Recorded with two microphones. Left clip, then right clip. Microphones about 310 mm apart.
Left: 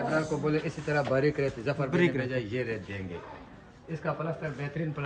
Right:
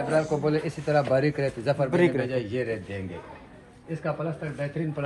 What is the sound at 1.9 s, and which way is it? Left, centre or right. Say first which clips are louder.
Speech: right 3 dB; centre.